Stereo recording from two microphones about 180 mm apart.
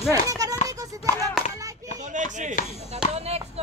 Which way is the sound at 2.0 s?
45° right (ahead or behind).